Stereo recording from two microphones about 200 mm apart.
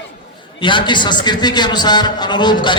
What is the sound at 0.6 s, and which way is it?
A man's voice, 25° left (ahead or behind).